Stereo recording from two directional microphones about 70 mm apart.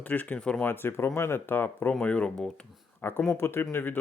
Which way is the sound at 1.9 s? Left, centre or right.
Centre.